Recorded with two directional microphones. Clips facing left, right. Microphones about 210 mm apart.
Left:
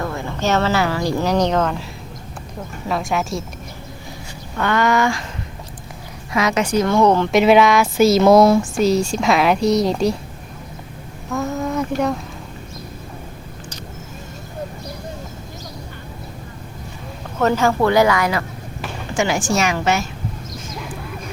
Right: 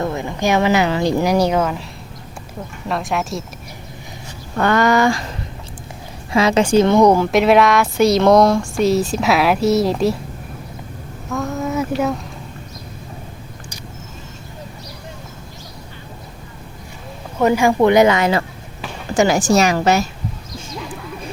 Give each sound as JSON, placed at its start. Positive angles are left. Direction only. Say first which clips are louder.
{"t": 0.0, "sound": "speech", "louder": "right 3 dB", "side_deg": -20}
{"t": 2.8, "sound": "speech", "louder": "even", "side_deg": 0}
{"t": 4.5, "sound": "a woman's voice", "louder": "right 3 dB", "side_deg": -40}
{"t": 6.3, "sound": "speech", "louder": "right 5 dB", "side_deg": -30}
{"t": 7.3, "sound": "speech", "louder": "even", "side_deg": 0}
{"t": 11.3, "sound": "a sound", "louder": "even", "side_deg": 0}
{"t": 17.3, "sound": "speech", "louder": "right 2 dB", "side_deg": -10}
{"t": 19.1, "sound": "a woman's voice", "louder": "right 5 dB", "side_deg": -40}